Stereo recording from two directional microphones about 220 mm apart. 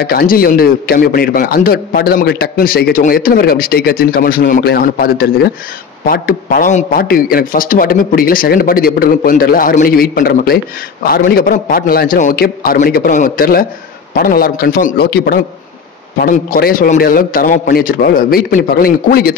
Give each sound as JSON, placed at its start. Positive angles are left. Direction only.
{"t": 0.0, "sound": "a man's voice", "side_deg": 45}